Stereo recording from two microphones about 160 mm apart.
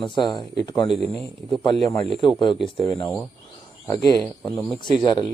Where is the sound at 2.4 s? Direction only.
30° left (ahead or behind).